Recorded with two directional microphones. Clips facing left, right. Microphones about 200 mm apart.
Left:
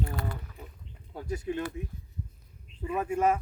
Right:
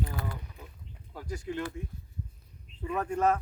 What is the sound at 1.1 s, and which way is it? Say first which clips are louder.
Speech: left 3 dB; 20° left (ahead or behind).